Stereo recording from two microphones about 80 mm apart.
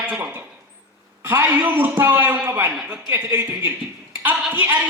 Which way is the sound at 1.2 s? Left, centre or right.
Right.